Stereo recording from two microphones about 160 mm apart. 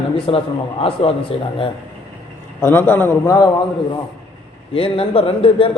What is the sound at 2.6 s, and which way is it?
Speech, 15° left (ahead or behind).